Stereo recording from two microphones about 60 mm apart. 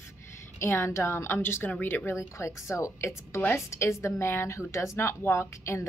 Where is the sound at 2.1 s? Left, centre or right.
Left.